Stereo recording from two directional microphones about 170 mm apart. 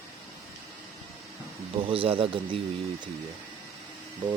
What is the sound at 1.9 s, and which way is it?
Speech, 30° right (ahead or behind).